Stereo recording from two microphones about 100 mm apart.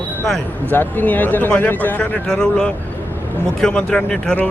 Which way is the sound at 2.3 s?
5° left (ahead or behind).